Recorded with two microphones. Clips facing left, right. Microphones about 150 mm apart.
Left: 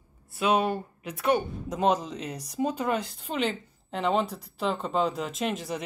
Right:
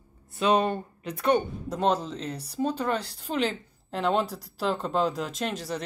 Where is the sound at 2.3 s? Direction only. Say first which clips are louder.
Even; 30° right (ahead or behind).